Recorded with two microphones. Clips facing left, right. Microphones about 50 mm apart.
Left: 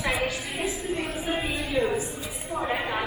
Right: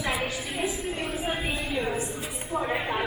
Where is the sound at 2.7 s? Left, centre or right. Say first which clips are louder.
Left 2 dB; left.